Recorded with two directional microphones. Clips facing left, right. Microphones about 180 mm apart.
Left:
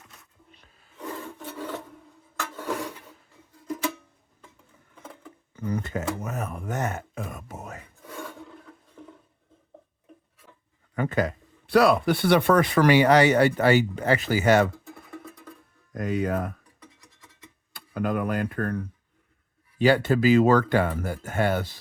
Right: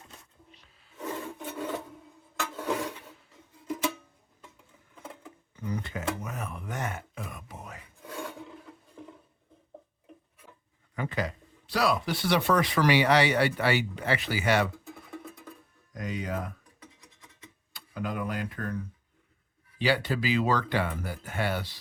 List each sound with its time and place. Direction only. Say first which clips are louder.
0.5 s rub: left 2 dB; 55° left (ahead or behind)
2.3 s a sound: even; centre (ahead or behind)
5.6 s speech: left 4 dB; 50° left (ahead or behind)
8.0 s filing: right 1 dB; 15° right (ahead or behind)
8.4 s a sound: even; centre (ahead or behind)
10.9 s speech: left 6 dB; 50° left (ahead or behind)
15.2 s music: left 1 dB; centre (ahead or behind)
15.9 s speech: left 8 dB; 55° left (ahead or behind)
16.8 s scratch: right 1 dB; centre (ahead or behind)
17.7 s speech: left 7 dB; 55° left (ahead or behind)